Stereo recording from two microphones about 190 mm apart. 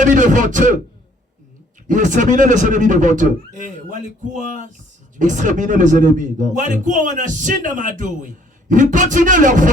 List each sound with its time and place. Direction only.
0.0 s speech: 40° right (ahead or behind)
1.9 s speech: 40° right (ahead or behind)
5.2 s speech: 40° right (ahead or behind)